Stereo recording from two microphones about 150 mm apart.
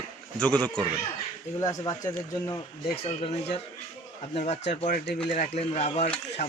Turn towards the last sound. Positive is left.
turn(degrees=45)  # may be behind; listen again after turning